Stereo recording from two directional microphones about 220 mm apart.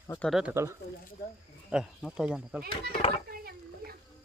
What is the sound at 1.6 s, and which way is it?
Speech, 5° right (ahead or behind).